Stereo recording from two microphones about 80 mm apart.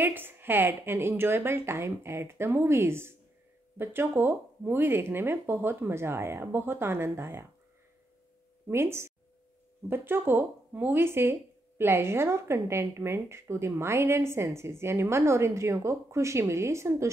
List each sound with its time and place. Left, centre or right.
0.0 s a woman's voice: right
8.6 s a woman's voice: right